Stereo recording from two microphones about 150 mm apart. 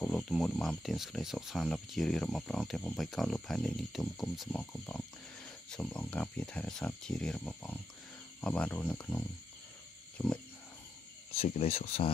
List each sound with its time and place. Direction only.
0.0 s speech: 5° left (ahead or behind)
10.1 s a sound: 10° left (ahead or behind)
11.4 s speech: 45° left (ahead or behind)